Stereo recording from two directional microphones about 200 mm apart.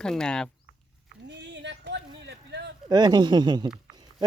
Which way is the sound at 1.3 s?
60° right (ahead or behind).